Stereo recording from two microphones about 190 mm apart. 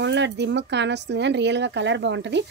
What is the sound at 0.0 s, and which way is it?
A woman's voice, 65° right (ahead or behind).